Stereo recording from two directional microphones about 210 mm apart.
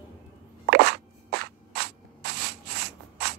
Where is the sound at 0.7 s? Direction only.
50° right (ahead or behind).